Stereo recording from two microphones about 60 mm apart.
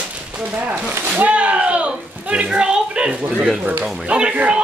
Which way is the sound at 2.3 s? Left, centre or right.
Centre.